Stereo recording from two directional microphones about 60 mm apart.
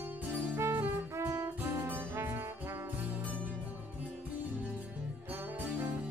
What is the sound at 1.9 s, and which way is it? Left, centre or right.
Brass instrument, right.